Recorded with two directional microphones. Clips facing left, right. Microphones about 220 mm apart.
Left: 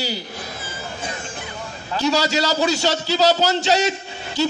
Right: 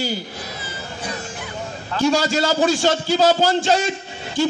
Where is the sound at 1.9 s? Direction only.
50° right (ahead or behind).